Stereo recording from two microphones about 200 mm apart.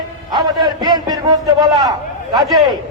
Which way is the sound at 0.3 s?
20° right (ahead or behind).